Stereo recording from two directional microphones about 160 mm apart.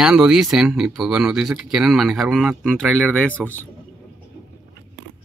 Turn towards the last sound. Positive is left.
turn(degrees=10)  # may be behind; listen again after turning